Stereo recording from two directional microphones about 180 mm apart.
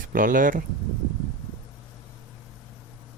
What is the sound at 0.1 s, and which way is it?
Speech, 50° right (ahead or behind).